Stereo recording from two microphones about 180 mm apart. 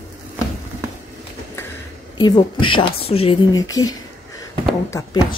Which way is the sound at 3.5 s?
20° left (ahead or behind).